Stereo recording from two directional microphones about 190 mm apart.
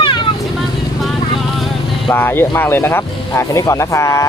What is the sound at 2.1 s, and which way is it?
Speech, 10° left (ahead or behind).